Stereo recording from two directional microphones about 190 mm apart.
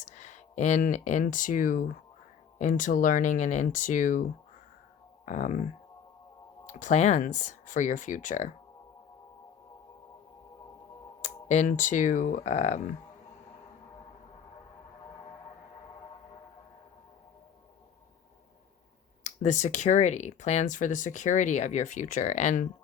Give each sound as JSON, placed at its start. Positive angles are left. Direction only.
{"t": 0.0, "sound": "speech", "side_deg": 40}
{"t": 6.7, "sound": "speech", "side_deg": 40}
{"t": 11.2, "sound": "speech", "side_deg": 40}
{"t": 19.2, "sound": "speech", "side_deg": 40}